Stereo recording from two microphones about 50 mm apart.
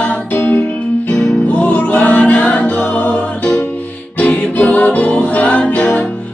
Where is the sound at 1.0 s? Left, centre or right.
Left.